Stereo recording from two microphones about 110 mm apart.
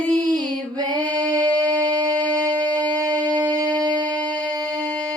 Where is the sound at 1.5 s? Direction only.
10° left (ahead or behind).